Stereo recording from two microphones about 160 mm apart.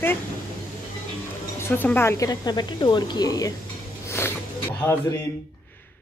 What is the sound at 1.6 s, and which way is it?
A woman's voice, 15° left (ahead or behind).